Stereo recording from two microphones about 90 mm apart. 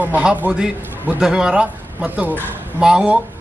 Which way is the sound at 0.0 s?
15° right (ahead or behind).